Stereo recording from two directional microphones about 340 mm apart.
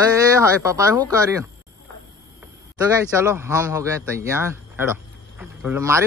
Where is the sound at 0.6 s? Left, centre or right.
Centre.